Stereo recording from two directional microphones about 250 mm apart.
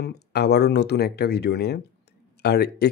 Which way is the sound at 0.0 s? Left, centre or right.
Left.